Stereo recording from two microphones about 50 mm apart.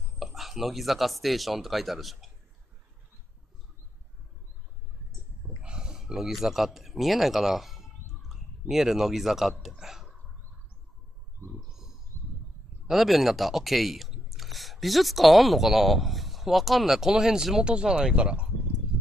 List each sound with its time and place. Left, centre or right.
0.2 s speech: centre
5.6 s speech: centre
11.5 s a sound: centre
12.1 s a sound: right
12.8 s speech: centre
18.1 s speech: right